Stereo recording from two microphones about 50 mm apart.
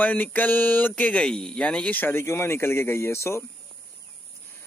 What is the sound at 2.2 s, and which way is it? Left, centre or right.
Speech, left.